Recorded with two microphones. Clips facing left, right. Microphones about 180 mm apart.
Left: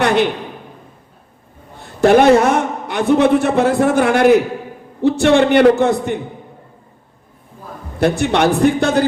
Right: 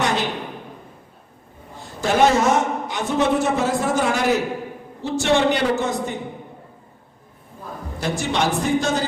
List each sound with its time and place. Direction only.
0.0 s a sound: 60° left (ahead or behind)
2.0 s a man's voice: 60° left (ahead or behind)
7.9 s a man's voice: 60° left (ahead or behind)